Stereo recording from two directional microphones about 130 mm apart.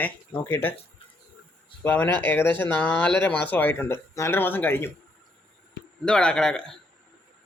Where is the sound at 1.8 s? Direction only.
10° left (ahead or behind).